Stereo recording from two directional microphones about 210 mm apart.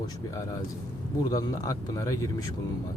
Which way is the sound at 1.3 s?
15° left (ahead or behind).